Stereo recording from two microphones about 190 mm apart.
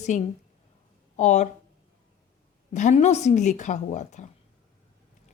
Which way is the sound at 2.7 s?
40° left (ahead or behind).